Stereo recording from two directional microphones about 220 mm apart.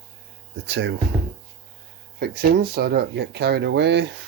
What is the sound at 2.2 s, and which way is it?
Speech, 45° right (ahead or behind).